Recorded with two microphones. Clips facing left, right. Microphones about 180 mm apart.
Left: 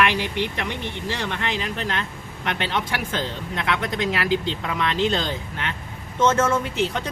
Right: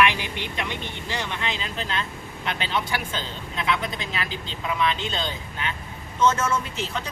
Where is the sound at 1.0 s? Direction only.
70° left (ahead or behind).